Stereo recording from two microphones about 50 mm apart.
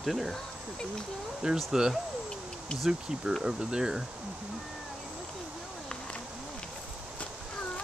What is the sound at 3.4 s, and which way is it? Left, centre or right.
Speech, centre.